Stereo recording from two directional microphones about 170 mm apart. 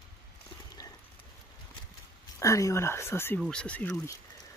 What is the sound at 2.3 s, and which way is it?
Speech, 20° left (ahead or behind).